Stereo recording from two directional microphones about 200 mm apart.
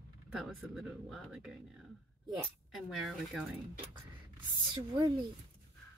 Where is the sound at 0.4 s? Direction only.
5° right (ahead or behind).